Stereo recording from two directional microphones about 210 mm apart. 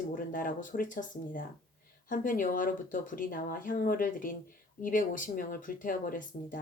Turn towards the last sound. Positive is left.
turn(degrees=40)  # may be behind; listen again after turning